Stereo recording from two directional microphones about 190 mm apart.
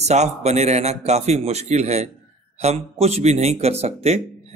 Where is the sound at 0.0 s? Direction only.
35° right (ahead or behind).